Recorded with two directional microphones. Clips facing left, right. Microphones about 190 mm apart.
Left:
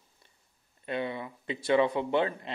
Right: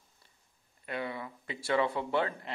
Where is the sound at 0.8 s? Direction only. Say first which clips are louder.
Left 4 dB; 25° left (ahead or behind).